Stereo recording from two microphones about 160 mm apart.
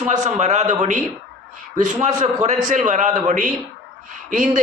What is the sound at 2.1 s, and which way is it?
A man's voice, 45° right (ahead or behind).